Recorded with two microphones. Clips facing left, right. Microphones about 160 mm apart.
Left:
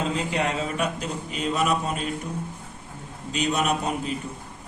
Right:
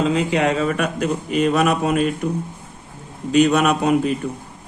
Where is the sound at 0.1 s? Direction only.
80° right.